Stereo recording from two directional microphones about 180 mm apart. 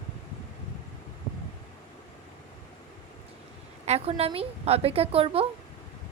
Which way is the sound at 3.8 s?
35° right (ahead or behind).